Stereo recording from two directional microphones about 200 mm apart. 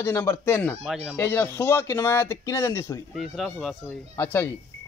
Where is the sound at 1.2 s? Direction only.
10° left (ahead or behind).